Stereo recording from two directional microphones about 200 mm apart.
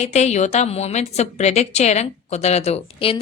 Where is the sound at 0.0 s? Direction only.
35° left (ahead or behind).